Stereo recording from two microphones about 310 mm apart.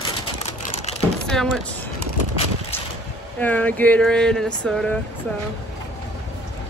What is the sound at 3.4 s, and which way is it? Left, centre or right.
Speech, centre.